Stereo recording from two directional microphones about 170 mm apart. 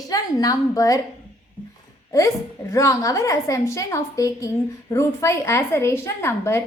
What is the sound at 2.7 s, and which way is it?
A woman's voice, 20° left (ahead or behind).